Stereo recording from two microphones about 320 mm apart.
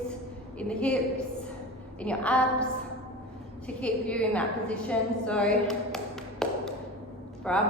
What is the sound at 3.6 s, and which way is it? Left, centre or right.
A woman's voice, centre.